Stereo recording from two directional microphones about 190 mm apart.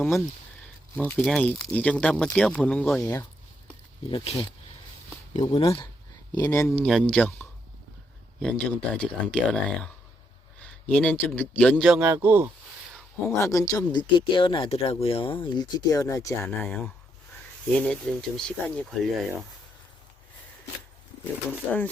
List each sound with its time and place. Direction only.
1.2 s a man's voice: 5° left (ahead or behind)
4.1 s speech: 30° left (ahead or behind)
6.4 s a man's voice: 15° left (ahead or behind)
6.8 s speech: 5° left (ahead or behind)
8.4 s speech: 5° left (ahead or behind)
10.6 s a sound: 5° left (ahead or behind)
11.3 s a man's voice: 10° left (ahead or behind)
11.9 s a man's voice: 10° right (ahead or behind)
13.2 s a man's voice: 15° left (ahead or behind)